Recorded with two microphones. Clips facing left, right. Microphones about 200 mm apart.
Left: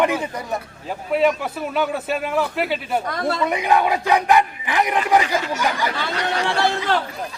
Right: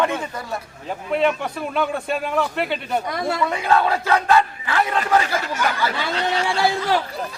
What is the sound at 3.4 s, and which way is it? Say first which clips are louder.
Speech: left 1 dB; 15° left (ahead or behind).